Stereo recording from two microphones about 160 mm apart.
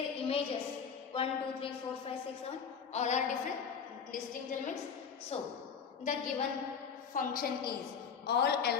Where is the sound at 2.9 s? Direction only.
45° left (ahead or behind).